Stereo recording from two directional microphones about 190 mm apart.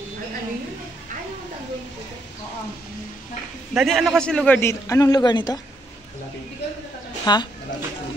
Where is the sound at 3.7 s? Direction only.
Centre (ahead or behind); by 5.6 s 20° left (ahead or behind).